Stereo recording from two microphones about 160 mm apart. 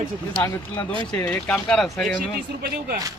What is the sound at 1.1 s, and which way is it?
Speech, 10° left (ahead or behind).